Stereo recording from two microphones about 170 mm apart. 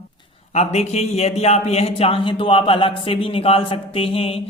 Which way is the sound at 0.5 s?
40° left (ahead or behind).